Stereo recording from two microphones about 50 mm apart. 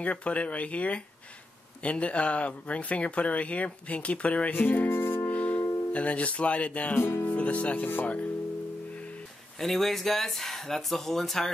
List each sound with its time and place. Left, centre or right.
0.0 s speech: left
4.5 s music: left
5.3 s music: left
5.9 s speech: left
7.0 s speech: left
7.2 s speech: left
9.6 s speech: centre